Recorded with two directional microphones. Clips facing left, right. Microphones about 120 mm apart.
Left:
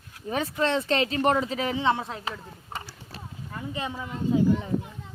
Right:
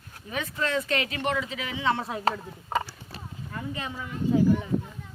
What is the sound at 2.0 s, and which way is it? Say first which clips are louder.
Speech: right 7 dB; 10° right (ahead or behind).